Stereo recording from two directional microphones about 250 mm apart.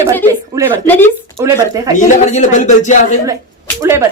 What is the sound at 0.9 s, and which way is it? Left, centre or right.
Speech, centre.